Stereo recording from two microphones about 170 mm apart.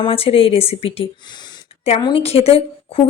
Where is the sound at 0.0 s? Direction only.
35° left (ahead or behind).